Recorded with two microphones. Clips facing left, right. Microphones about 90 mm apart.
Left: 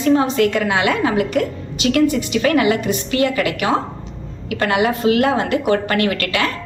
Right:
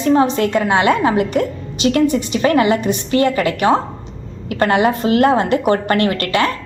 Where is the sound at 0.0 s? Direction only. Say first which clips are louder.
Right 1 dB; 30° right (ahead or behind).